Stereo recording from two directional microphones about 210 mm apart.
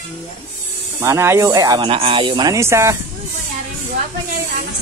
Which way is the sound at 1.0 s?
15° right (ahead or behind).